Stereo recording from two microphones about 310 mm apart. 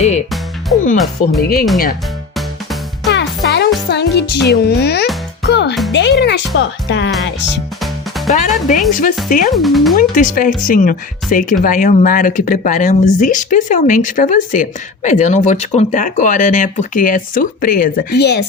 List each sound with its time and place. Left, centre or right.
1.4 s speech: left
3.1 s music: left
3.8 s speech: left
7.3 s music: left
8.4 s speech: left
9.5 s speech: centre
9.9 s speech: left